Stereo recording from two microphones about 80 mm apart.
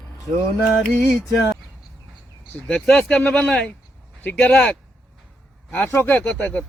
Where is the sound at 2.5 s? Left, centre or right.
Centre.